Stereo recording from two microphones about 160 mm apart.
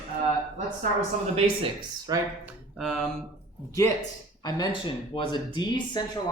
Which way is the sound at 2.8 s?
Centre (ahead or behind).